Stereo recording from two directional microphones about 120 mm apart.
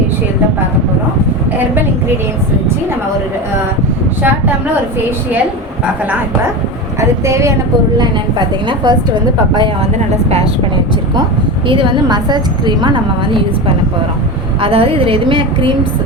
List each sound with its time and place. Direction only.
7.3 s a woman's voice: 25° right (ahead or behind)
7.9 s a woman's voice: 35° right (ahead or behind)
11.7 s a woman's voice: 45° right (ahead or behind)
14.6 s a woman's voice: 50° right (ahead or behind)